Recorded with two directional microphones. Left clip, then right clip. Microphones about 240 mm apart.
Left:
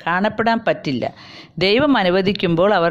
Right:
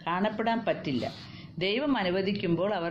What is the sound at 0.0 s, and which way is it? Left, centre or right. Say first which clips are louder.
Speech: left 11 dB; left.